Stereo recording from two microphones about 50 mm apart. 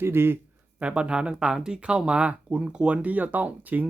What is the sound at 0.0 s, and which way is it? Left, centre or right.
Speech, right.